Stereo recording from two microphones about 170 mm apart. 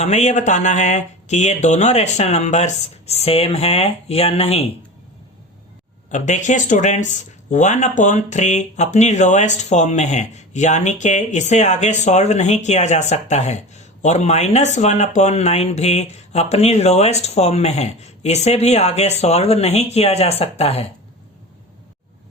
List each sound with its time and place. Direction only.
0.0 s speech: 40° left (ahead or behind)
6.1 s speech: 45° left (ahead or behind)